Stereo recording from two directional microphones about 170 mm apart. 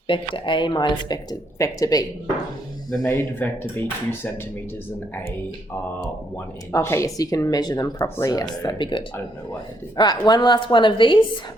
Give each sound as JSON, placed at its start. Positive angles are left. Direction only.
{"t": 0.1, "sound": "speech", "side_deg": 30}
{"t": 6.7, "sound": "speech", "side_deg": 15}